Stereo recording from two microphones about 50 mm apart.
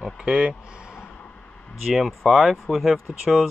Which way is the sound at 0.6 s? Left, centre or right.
Centre.